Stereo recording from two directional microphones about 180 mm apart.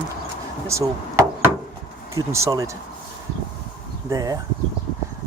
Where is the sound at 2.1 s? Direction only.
15° right (ahead or behind).